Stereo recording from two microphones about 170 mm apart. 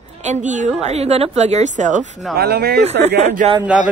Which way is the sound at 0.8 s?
40° right (ahead or behind).